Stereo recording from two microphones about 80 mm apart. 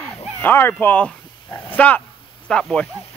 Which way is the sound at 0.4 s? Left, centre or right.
Left.